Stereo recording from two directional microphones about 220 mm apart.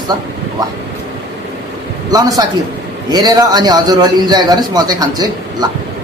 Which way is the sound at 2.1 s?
15° right (ahead or behind).